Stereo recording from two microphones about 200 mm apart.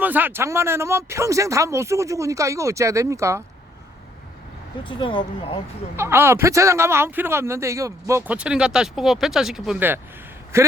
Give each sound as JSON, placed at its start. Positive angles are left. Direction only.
{"t": 0.0, "sound": "speech", "side_deg": -10}
{"t": 4.9, "sound": "speech", "side_deg": 25}
{"t": 6.0, "sound": "speech", "side_deg": -10}